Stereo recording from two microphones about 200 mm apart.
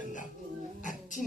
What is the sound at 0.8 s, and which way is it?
Child singing, 40° left (ahead or behind).